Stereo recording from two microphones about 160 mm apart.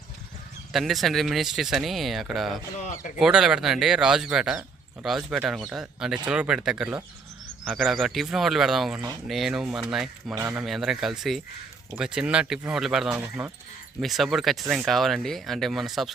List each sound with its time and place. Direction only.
0.7 s speech: centre (ahead or behind)
2.7 s speech: 50° left (ahead or behind)
3.2 s speech: 5° right (ahead or behind)
10.3 s speech: 15° right (ahead or behind)
10.6 s speech: centre (ahead or behind)
13.2 s speech: 15° right (ahead or behind)
14.0 s speech: centre (ahead or behind)